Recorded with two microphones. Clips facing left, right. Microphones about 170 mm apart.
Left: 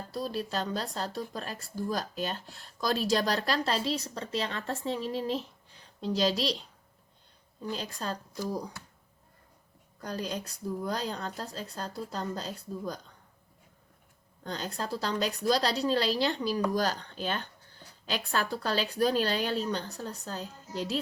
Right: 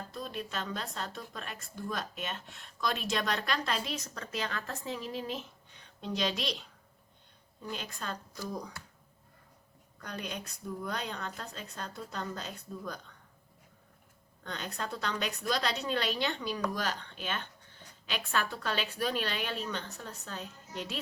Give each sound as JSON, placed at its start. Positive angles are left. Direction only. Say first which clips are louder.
{"t": 0.1, "sound": "speech", "louder": "left 8 dB", "side_deg": 35}
{"t": 7.7, "sound": "speech", "louder": "left 4 dB", "side_deg": 35}
{"t": 10.0, "sound": "speech", "louder": "left 5 dB", "side_deg": 35}
{"t": 14.4, "sound": "speech", "louder": "left 3 dB", "side_deg": 35}